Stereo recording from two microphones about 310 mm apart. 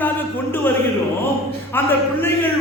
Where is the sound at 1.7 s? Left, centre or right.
Centre.